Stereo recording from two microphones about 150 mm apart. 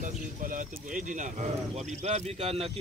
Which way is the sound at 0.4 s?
60° right (ahead or behind).